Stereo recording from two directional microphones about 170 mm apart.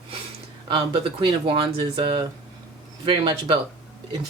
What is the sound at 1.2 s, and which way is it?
A woman's voice, 30° right (ahead or behind).